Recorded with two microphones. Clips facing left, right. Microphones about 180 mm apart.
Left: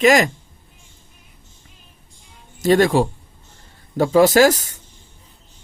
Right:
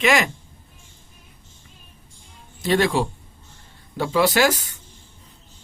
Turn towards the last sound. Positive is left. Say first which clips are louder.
# left 6 dB
turn(degrees=40)  # may be behind; listen again after turning